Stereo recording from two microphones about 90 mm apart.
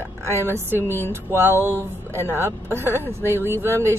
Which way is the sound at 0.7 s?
25° left (ahead or behind).